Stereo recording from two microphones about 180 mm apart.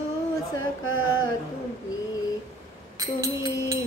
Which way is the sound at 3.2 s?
20° right (ahead or behind).